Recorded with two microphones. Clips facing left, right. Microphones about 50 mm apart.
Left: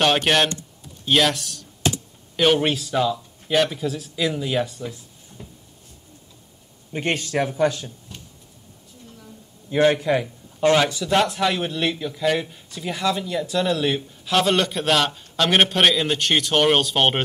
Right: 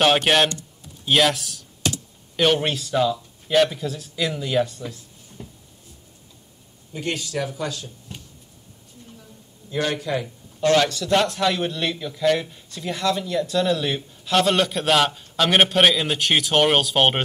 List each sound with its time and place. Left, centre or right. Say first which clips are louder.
0.0 s a man's voice: right 1 dB; centre
6.9 s a man's voice: left 4 dB; left
9.7 s a man's voice: left 6 dB; left
10.2 s a man's voice: left 2 dB; centre